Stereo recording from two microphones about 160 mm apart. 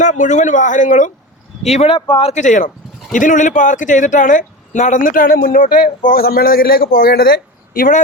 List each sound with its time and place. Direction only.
0.0 s speech: 50° left (ahead or behind)
2.0 s speech: 30° left (ahead or behind)
2.3 s speech: 50° left (ahead or behind)